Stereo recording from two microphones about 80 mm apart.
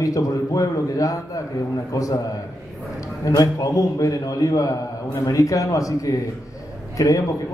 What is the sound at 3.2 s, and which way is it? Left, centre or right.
A man's voice, left.